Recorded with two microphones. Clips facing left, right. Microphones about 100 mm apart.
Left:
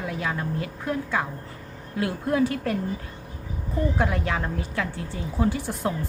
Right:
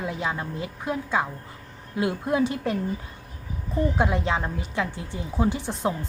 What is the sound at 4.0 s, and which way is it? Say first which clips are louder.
A woman's voice: right 1 dB; 20° right (ahead or behind).